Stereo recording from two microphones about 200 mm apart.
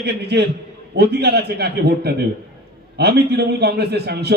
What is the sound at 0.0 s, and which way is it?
A man's voice, 55° right (ahead or behind).